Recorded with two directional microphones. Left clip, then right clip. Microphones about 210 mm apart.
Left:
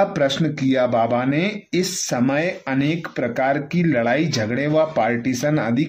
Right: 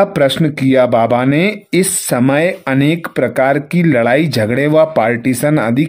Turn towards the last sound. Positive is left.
turn(degrees=-45)  # may be behind; listen again after turning